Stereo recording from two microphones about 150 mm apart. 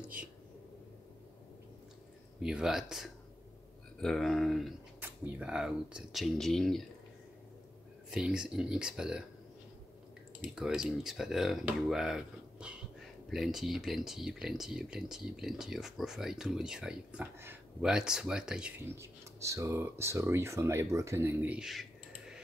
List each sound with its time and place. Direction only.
0.2 s speech: 10° right (ahead or behind)
2.4 s speech: 5° right (ahead or behind)
8.1 s speech: 5° right (ahead or behind)
10.4 s speech: 5° right (ahead or behind)
18.9 s speech: 20° right (ahead or behind); by 22.4 s 5° right (ahead or behind)